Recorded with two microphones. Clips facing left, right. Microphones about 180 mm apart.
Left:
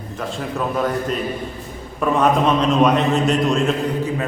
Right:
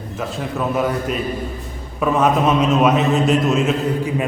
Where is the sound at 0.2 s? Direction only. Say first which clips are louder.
Right 1 dB; centre (ahead or behind).